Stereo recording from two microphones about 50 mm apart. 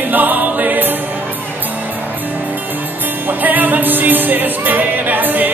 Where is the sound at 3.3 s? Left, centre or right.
Right.